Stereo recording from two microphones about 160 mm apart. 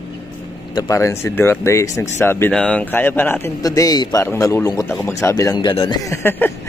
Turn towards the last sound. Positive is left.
turn(degrees=15)  # may be behind; listen again after turning